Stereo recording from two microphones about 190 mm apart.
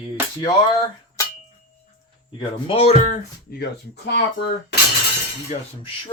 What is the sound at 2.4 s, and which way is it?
Speech, 30° left (ahead or behind).